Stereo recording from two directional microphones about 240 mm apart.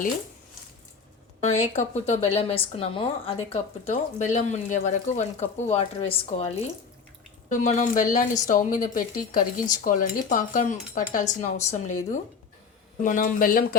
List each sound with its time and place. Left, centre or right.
1.5 s a woman's voice: left